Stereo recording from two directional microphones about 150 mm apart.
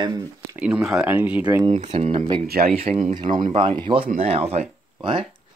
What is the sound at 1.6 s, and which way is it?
Speech, 45° right (ahead or behind).